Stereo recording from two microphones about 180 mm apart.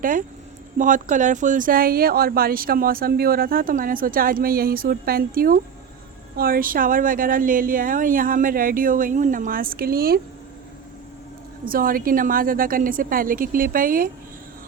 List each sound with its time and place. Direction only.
0.0 s speech: 50° right (ahead or behind)
11.6 s speech: 50° right (ahead or behind)